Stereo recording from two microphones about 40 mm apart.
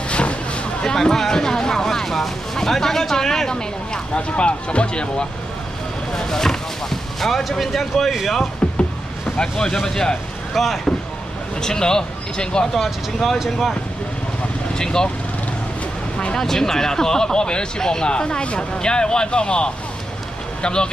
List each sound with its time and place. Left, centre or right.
0.1 s vehicle: left
0.8 s speech: centre
6.1 s speech: centre
9.4 s speech: left
10.5 s speech: centre
11.6 s speech: centre
12.7 s speech: centre
14.8 s speech: centre
16.3 s speech: centre